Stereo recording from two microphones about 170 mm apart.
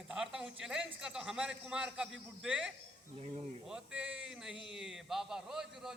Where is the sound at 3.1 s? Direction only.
40° right (ahead or behind).